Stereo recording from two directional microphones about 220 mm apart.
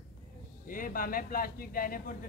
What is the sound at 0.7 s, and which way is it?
Speech, 40° left (ahead or behind).